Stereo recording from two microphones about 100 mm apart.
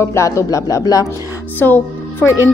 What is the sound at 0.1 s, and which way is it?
Speech, 30° left (ahead or behind).